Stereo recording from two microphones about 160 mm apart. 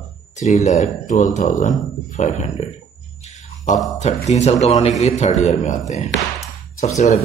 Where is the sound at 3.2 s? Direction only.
45° left (ahead or behind).